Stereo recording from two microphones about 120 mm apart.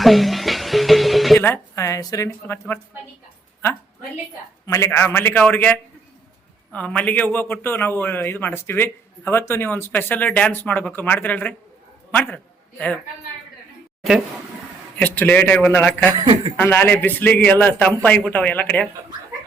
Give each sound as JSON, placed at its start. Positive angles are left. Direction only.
{"t": 0.0, "sound": "music", "side_deg": 0}
{"t": 1.4, "sound": "a woman's voice", "side_deg": 20}
{"t": 4.6, "sound": "a man's voice", "side_deg": 25}
{"t": 14.9, "sound": "a man's voice", "side_deg": 10}